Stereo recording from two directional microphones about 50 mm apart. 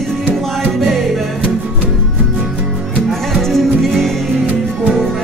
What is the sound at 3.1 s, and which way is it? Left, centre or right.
Music, centre.